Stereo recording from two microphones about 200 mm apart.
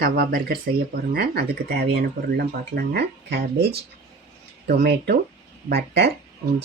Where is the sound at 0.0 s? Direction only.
50° right (ahead or behind).